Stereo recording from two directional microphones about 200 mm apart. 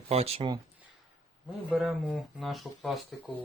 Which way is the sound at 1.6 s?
Centre (ahead or behind).